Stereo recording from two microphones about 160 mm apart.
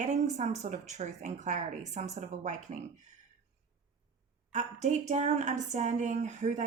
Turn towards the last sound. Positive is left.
turn(degrees=-45)  # may be behind; listen again after turning